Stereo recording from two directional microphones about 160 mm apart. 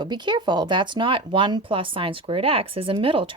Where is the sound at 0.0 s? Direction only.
30° right (ahead or behind).